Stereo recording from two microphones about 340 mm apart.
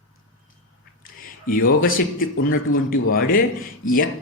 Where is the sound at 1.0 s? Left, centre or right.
Left.